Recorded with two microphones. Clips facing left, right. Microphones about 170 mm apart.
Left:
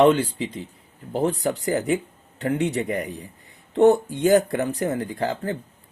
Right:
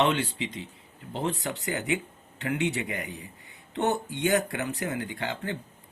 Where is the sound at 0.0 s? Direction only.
35° left (ahead or behind).